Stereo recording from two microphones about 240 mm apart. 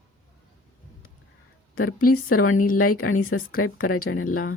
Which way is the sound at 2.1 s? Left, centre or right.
Left.